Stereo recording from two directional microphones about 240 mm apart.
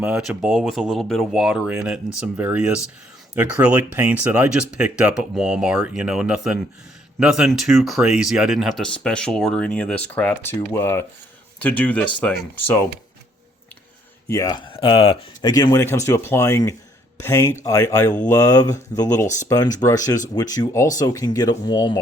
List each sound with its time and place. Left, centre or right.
0.0 s speech: centre
14.3 s speech: centre